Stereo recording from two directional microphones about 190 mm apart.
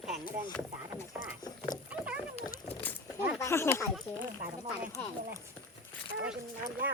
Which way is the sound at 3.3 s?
15° left (ahead or behind).